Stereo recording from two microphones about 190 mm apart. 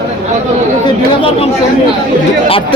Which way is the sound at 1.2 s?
30° left (ahead or behind).